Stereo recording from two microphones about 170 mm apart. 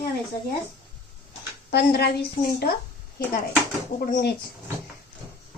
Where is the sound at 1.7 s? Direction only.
70° left (ahead or behind).